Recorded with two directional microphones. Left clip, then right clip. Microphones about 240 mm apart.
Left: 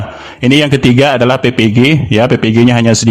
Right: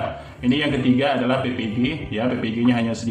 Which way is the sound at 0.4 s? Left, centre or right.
Left.